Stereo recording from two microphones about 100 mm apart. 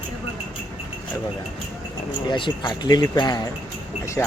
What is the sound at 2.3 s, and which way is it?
Speech, 55° left (ahead or behind).